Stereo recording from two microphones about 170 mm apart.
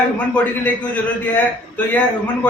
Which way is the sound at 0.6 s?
10° left (ahead or behind).